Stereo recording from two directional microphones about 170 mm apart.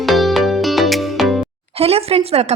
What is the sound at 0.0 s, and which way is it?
Music, centre (ahead or behind).